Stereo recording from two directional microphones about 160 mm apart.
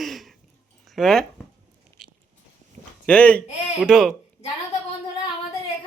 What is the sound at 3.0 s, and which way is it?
Speech, 10° left (ahead or behind).